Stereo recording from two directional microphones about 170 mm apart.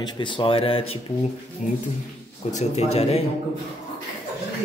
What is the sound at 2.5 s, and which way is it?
Speech, 40° left (ahead or behind).